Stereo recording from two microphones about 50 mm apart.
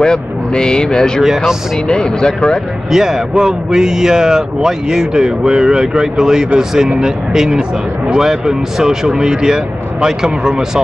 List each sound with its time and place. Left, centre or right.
0.0 s speech: centre
1.2 s speech: centre
1.9 s speech: centre
2.9 s speech: centre